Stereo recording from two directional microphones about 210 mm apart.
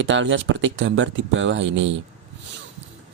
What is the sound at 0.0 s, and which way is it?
Speech, 60° right (ahead or behind).